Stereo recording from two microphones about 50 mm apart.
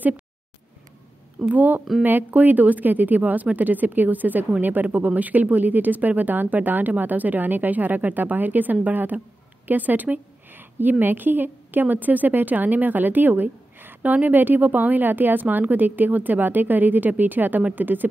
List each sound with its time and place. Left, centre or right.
1.5 s a woman's voice: right